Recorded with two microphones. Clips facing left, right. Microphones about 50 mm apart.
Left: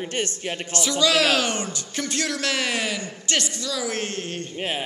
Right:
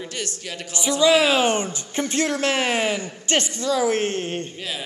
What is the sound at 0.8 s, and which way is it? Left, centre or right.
Speech, right.